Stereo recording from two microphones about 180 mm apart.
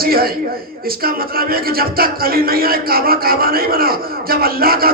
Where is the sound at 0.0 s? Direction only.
55° right (ahead or behind).